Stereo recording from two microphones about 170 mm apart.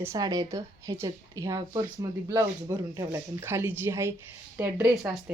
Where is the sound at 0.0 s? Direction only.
20° right (ahead or behind).